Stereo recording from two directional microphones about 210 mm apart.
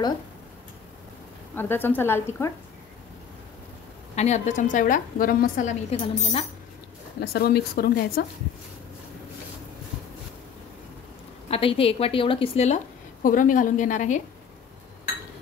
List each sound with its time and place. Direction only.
1.5 s a woman's voice: 10° left (ahead or behind)
4.1 s a woman's voice: 30° left (ahead or behind)
7.2 s speech: 50° left (ahead or behind)
11.5 s a woman's voice: 25° left (ahead or behind)